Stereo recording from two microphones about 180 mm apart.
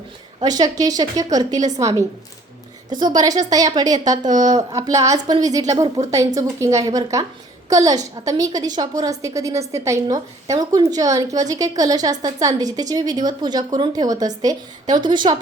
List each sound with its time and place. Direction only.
0.3 s a woman's voice: 20° right (ahead or behind)